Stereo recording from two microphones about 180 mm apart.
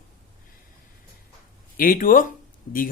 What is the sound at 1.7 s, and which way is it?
Speech, 50° left (ahead or behind).